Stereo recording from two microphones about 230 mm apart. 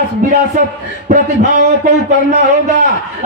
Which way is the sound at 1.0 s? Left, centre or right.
Right.